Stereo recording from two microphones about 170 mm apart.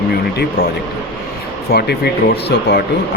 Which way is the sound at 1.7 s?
70° left (ahead or behind).